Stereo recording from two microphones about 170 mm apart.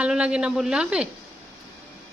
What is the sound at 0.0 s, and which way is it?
A man's voice, 5° right (ahead or behind).